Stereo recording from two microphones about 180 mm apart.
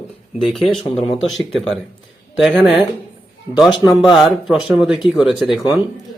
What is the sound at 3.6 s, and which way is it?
Speech, 15° left (ahead or behind).